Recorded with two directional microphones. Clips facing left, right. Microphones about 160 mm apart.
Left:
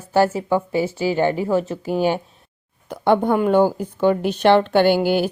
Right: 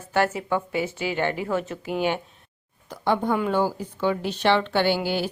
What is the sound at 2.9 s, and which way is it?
A woman's voice, 55° left (ahead or behind).